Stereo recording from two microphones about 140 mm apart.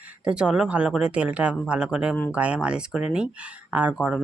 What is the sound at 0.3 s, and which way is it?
Speech, 5° right (ahead or behind).